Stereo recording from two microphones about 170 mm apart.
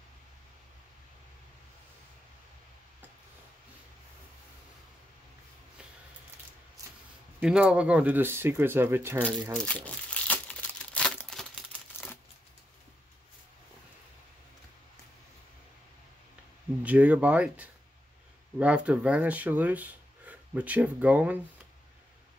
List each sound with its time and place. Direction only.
7.3 s speech: 5° right (ahead or behind)
9.6 s crumpling: 10° left (ahead or behind)
16.8 s speech: 10° right (ahead or behind)